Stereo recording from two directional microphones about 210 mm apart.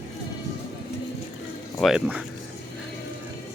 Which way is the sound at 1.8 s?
5° right (ahead or behind).